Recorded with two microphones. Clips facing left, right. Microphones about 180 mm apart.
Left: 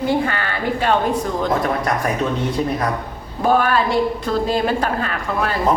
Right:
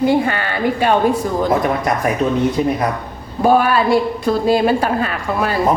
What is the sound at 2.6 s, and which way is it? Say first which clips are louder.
A woman's voice: right 3 dB; 10° right (ahead or behind).